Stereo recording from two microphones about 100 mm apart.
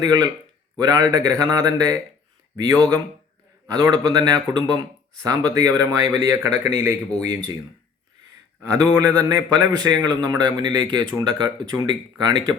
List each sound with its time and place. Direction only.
0.0 s a man's voice: 45° right (ahead or behind)
8.8 s a man's voice: 35° right (ahead or behind)